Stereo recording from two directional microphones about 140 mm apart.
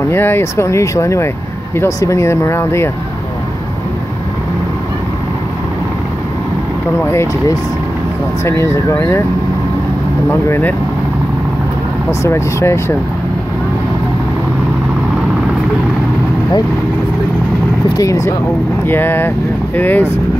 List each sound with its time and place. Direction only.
0.1 s speech: 15° left (ahead or behind)
7.1 s speech: 20° left (ahead or behind)
12.1 s speech: 20° left (ahead or behind)
17.8 s speech: 25° left (ahead or behind)